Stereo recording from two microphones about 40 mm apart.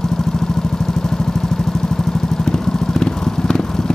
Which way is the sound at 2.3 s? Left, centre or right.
Centre.